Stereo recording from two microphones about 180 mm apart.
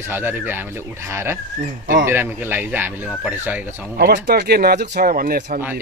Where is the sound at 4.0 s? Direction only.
60° right (ahead or behind).